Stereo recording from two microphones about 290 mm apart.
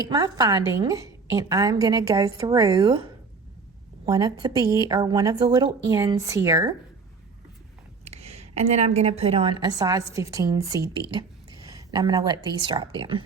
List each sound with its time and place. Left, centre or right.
0.1 s a woman's voice: centre
8.0 s a woman's voice: right